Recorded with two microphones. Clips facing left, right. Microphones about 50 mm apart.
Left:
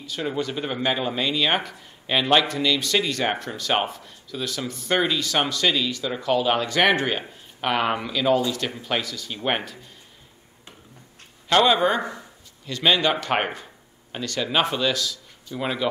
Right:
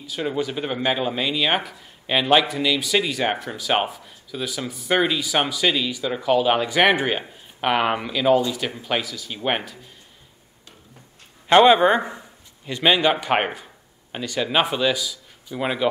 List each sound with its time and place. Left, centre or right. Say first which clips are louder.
0.0 s speech: right 2 dB; centre
11.4 s a man's voice: right 5 dB; right